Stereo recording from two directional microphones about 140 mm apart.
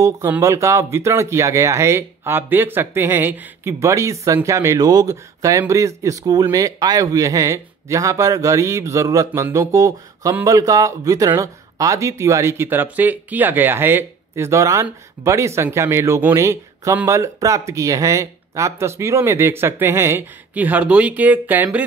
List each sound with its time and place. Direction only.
0.4 s speech: 20° right (ahead or behind)